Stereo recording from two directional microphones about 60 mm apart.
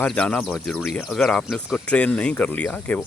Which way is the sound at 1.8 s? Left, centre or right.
Centre.